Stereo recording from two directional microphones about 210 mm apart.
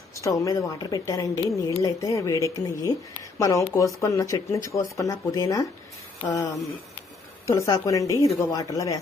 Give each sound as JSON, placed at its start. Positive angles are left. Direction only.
{"t": 0.2, "sound": "a woman's voice", "side_deg": 15}